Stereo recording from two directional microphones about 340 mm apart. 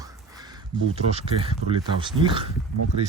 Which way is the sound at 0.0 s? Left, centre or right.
Centre.